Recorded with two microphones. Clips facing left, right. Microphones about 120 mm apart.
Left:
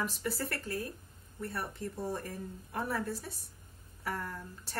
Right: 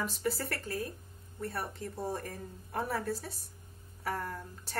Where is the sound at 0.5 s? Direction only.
35° right (ahead or behind).